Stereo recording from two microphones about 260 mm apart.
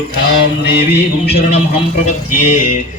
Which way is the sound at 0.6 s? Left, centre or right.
Left.